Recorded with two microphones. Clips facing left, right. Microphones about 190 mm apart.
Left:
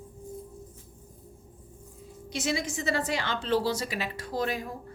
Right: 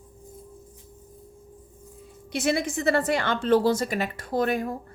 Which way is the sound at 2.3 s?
60° right (ahead or behind).